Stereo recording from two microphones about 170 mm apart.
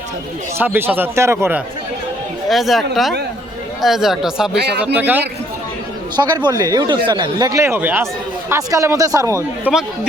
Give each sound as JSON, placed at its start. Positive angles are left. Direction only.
{"t": 0.6, "sound": "speech", "side_deg": -10}
{"t": 2.5, "sound": "speech", "side_deg": 0}
{"t": 4.5, "sound": "speech", "side_deg": -75}
{"t": 4.9, "sound": "speech", "side_deg": -10}
{"t": 6.1, "sound": "speech", "side_deg": -25}
{"t": 9.7, "sound": "speech", "side_deg": -10}